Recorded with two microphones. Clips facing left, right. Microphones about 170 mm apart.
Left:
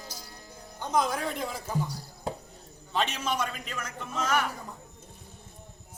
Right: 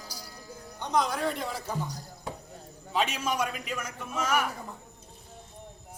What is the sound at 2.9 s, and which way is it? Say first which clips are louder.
A man's voice: right 1 dB; 10° right (ahead or behind).